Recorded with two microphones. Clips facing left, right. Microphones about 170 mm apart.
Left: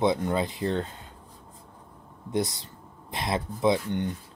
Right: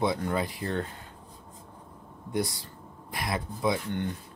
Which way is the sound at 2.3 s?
20° left (ahead or behind).